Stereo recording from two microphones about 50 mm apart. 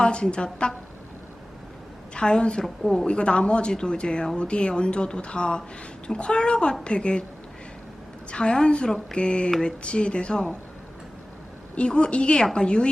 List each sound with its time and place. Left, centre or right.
0.0 s a woman's voice: centre
2.1 s a woman's voice: centre
8.3 s a woman's voice: left
11.7 s a woman's voice: left